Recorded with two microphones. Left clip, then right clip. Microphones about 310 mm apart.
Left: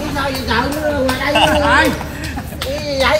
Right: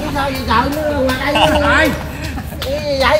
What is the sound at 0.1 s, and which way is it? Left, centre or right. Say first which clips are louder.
Speech: right 3 dB; right.